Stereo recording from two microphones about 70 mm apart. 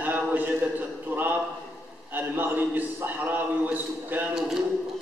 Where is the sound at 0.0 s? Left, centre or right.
Right.